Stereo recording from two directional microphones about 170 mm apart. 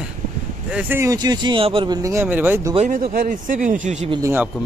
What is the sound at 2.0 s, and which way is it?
Speech, 15° right (ahead or behind).